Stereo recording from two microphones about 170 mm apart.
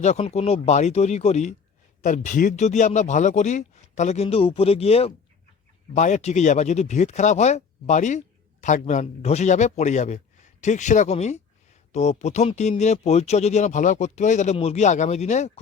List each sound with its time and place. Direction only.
0.0 s speech: 40° left (ahead or behind)